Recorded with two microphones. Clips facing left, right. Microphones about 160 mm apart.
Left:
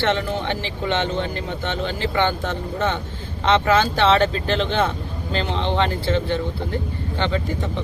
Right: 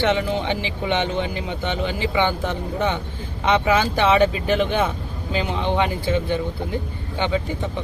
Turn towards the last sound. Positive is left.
turn(degrees=-10)  # may be behind; listen again after turning